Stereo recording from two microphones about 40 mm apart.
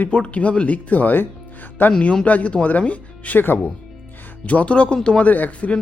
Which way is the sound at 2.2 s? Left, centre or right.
Left.